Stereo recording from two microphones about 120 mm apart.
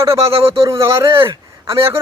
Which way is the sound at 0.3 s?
50° right (ahead or behind).